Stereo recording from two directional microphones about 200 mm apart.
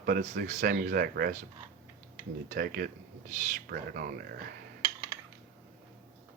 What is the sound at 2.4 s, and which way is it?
Speech, 45° right (ahead or behind).